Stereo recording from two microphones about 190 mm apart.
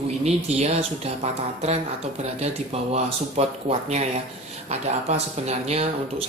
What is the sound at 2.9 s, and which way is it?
Speech, 35° right (ahead or behind).